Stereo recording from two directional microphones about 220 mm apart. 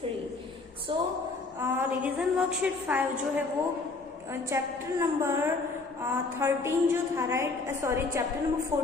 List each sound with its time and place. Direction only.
0.9 s speech: 20° right (ahead or behind)
1.6 s a woman's voice: 10° right (ahead or behind)